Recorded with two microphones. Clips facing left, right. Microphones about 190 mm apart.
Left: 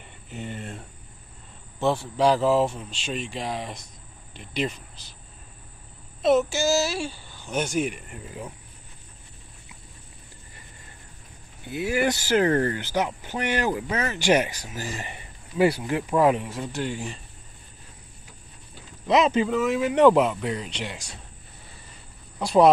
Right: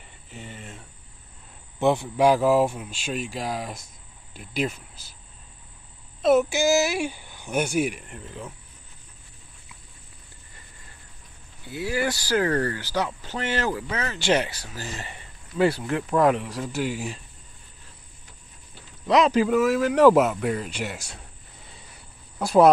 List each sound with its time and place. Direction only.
1.8 s speech: 15° right (ahead or behind)
6.2 s speech: 10° right (ahead or behind); by 8.5 s 10° left (ahead or behind)
11.6 s speech: 20° left (ahead or behind); by 17.2 s 5° right (ahead or behind)
19.0 s speech: centre (ahead or behind)
22.4 s speech: 5° right (ahead or behind)